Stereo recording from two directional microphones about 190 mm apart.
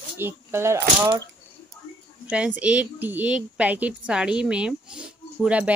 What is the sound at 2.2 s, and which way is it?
Speech, 5° right (ahead or behind).